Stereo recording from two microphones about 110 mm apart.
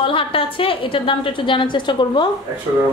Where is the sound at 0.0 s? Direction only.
50° left (ahead or behind).